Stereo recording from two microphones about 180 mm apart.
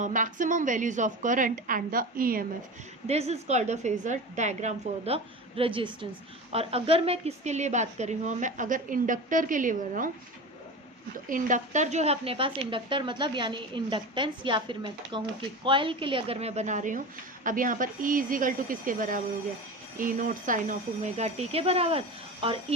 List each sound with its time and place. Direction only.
0.0 s a woman's voice: 45° right (ahead or behind)
3.1 s a woman's voice: 35° right (ahead or behind)
11.3 s a woman's voice: 45° right (ahead or behind)